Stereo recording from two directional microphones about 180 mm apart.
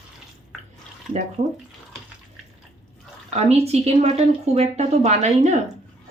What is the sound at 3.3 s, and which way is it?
Speech, 35° right (ahead or behind).